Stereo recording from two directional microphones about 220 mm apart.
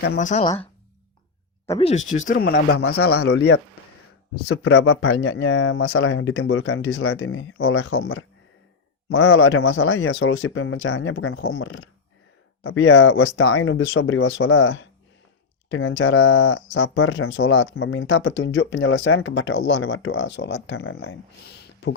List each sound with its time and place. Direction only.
0.0 s speech: 40° left (ahead or behind)
1.8 s speech: 30° left (ahead or behind); by 3.5 s 50° left (ahead or behind)
4.4 s speech: 70° left (ahead or behind)